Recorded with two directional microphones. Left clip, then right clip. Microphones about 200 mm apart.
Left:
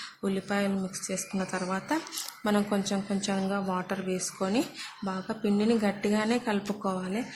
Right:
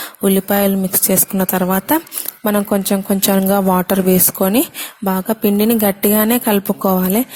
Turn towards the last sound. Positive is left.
turn(degrees=-50)  # may be behind; listen again after turning